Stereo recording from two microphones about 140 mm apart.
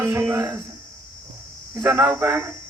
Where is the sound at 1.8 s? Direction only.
20° right (ahead or behind).